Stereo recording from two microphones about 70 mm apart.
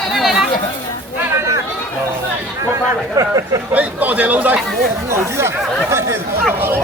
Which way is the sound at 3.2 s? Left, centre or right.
Right.